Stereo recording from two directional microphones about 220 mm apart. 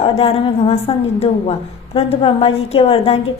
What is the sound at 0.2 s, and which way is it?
A woman's voice, 25° left (ahead or behind).